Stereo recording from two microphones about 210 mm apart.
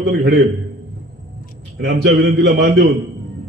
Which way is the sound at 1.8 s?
55° right (ahead or behind).